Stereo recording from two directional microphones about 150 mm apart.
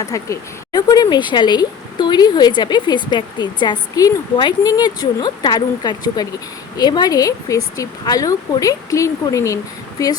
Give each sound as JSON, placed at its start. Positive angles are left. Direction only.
{"t": 0.0, "sound": "speech", "side_deg": 20}